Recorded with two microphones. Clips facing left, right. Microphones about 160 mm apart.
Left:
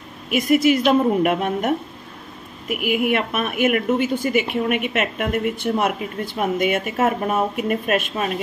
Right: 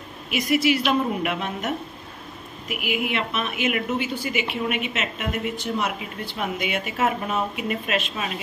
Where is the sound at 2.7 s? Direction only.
50° left (ahead or behind).